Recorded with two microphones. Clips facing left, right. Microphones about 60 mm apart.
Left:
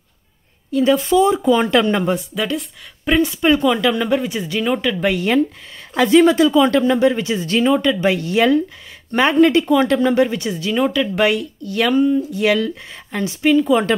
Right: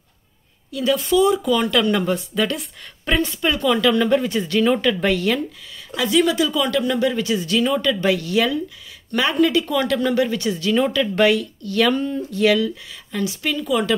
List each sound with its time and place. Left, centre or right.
0.7 s speech: left
2.3 s speech: centre
3.4 s speech: left
3.8 s speech: centre
5.1 s speech: left
5.9 s speech: left
11.9 s speech: centre
12.5 s speech: left